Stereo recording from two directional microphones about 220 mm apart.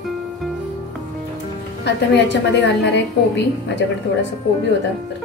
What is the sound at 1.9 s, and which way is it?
A woman's voice, 50° left (ahead or behind).